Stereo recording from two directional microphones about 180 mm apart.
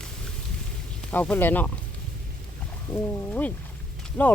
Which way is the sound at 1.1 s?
10° left (ahead or behind).